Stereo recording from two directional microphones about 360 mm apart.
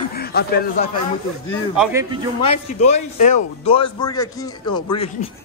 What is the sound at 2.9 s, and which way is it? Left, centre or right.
A man's voice, centre.